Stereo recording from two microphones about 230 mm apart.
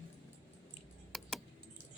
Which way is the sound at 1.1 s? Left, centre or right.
Centre.